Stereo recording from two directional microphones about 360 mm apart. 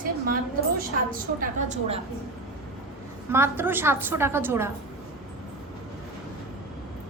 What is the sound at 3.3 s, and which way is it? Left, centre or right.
A woman's voice, centre.